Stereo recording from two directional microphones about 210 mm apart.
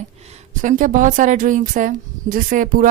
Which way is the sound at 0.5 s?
35° right (ahead or behind).